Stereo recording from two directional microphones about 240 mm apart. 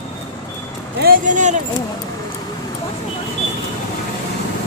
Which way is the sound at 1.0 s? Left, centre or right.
Right.